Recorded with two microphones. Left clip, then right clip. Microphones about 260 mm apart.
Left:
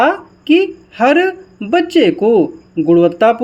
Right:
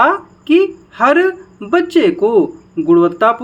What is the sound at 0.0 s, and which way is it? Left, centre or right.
A woman's voice, centre.